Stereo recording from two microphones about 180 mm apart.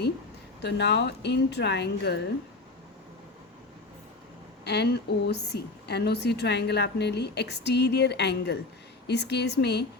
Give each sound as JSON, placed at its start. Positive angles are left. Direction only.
{"t": 0.6, "sound": "a woman's voice", "side_deg": 70}
{"t": 4.6, "sound": "a woman's voice", "side_deg": 65}